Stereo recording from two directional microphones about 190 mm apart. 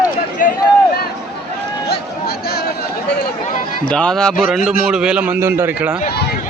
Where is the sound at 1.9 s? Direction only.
55° left (ahead or behind).